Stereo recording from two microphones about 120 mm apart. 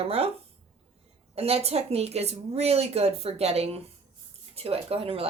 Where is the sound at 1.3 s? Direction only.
60° right (ahead or behind).